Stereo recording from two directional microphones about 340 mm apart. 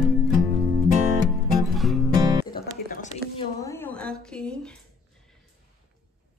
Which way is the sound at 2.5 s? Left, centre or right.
Left.